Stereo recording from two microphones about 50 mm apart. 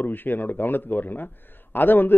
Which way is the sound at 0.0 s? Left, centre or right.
Left.